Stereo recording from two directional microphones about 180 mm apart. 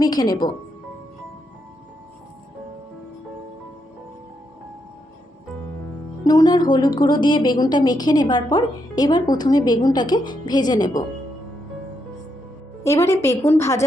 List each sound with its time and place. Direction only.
0.0 s a woman's voice: 20° left (ahead or behind)
6.2 s a woman's voice: 20° left (ahead or behind)
12.8 s a woman's voice: 15° left (ahead or behind)